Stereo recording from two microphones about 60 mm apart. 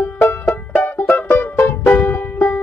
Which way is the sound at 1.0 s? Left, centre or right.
Left.